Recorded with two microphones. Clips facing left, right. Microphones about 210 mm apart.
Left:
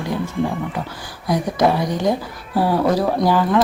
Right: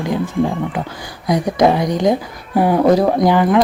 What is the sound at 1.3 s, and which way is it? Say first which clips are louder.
A woman's voice: right 4 dB; 15° right (ahead or behind).